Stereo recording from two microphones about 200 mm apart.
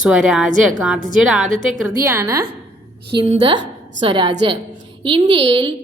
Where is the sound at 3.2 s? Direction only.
25° right (ahead or behind).